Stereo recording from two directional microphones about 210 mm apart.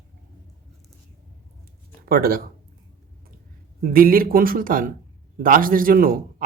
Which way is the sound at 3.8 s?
45° right (ahead or behind).